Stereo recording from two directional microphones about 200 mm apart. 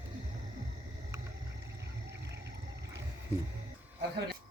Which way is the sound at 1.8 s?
60° right (ahead or behind).